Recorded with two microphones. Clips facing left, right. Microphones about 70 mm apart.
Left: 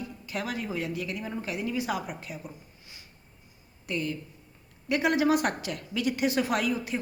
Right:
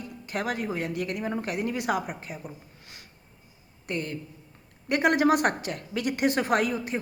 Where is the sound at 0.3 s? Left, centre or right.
Right.